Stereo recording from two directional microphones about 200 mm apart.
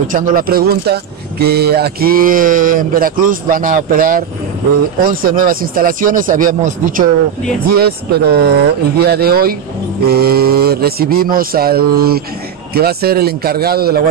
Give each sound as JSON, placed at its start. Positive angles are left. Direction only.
{"t": 0.1, "sound": "speech", "side_deg": -45}